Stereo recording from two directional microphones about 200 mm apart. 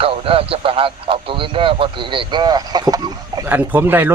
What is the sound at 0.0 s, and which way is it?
Speech, 30° right (ahead or behind).